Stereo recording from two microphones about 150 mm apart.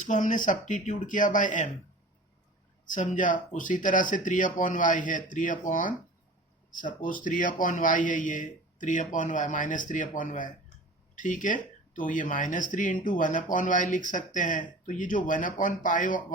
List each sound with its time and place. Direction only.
0.0 s speech: 55° left (ahead or behind)
2.8 s speech: 55° left (ahead or behind)